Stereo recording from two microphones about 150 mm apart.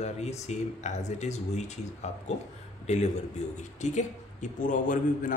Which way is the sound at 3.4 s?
50° left (ahead or behind).